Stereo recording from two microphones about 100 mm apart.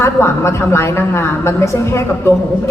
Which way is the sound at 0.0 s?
25° left (ahead or behind).